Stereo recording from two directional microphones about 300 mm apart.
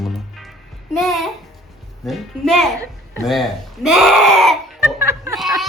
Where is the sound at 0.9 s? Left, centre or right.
Centre.